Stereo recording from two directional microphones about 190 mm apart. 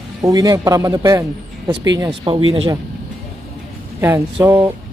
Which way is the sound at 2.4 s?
90° right.